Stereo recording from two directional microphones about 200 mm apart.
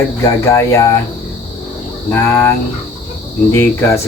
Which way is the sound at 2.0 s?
10° left (ahead or behind).